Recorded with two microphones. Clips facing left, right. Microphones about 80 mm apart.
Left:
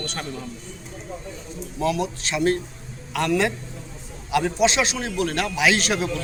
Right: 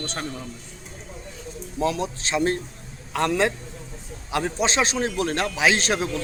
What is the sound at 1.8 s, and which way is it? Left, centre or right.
A man's voice, right.